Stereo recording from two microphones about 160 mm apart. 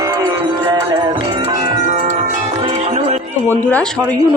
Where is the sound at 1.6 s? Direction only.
40° right (ahead or behind).